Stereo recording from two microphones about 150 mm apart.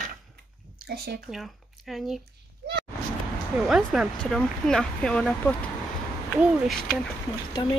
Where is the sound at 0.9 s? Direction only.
90° right.